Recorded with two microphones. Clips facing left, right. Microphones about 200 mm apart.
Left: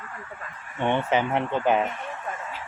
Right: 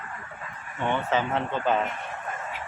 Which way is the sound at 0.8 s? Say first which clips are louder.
Left 3 dB; 20° left (ahead or behind).